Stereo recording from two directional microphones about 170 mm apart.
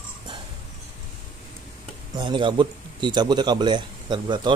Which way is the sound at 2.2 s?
30° right (ahead or behind).